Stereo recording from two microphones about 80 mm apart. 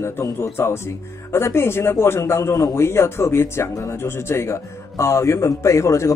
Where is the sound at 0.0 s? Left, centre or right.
Left.